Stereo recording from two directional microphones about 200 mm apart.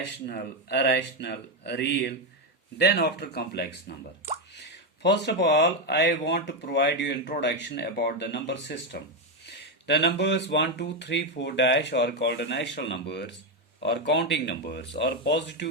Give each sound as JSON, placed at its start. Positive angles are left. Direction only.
{"t": 0.0, "sound": "speech", "side_deg": 60}
{"t": 5.0, "sound": "speech", "side_deg": 60}